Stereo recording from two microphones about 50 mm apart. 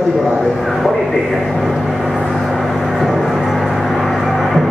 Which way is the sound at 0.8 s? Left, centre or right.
Centre.